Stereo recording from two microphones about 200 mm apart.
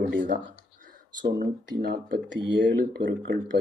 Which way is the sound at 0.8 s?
40° right (ahead or behind).